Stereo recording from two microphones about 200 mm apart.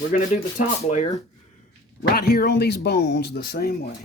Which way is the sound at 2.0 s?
50° left (ahead or behind).